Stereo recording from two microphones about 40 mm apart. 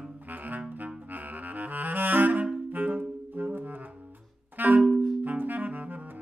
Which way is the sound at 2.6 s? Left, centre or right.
Right.